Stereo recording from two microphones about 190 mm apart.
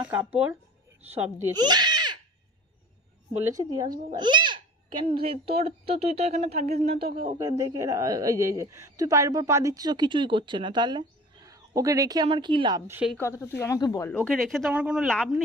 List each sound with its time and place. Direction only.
0.0 s speech: 10° right (ahead or behind)
1.6 s a sound: 20° right (ahead or behind)
3.4 s a woman's voice: 20° right (ahead or behind)
4.1 s babbling: 25° right (ahead or behind)
5.1 s speech: 30° right (ahead or behind)
7.3 s a woman's voice: 20° right (ahead or behind)
12.9 s speech: 10° right (ahead or behind)
13.1 s speech: 15° left (ahead or behind)
14.1 s speech: 5° left (ahead or behind)